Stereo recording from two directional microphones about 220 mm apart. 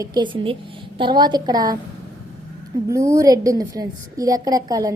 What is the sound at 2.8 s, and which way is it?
A woman's voice, 15° right (ahead or behind).